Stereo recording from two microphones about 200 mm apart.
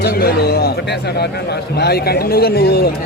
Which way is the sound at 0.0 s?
50° left (ahead or behind).